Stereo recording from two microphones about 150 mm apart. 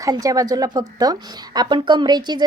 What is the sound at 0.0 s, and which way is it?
Speech, 25° right (ahead or behind).